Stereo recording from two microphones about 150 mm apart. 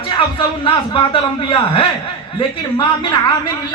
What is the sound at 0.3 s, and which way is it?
A man's voice, 35° left (ahead or behind).